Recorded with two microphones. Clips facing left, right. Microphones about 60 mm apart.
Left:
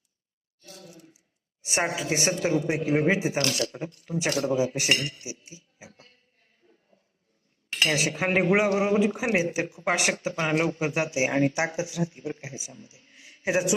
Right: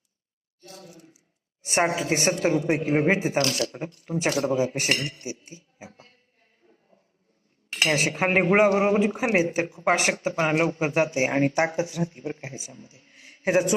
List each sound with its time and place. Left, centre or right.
1.6 s speech: right
7.7 s speech: right
13.1 s a sound: right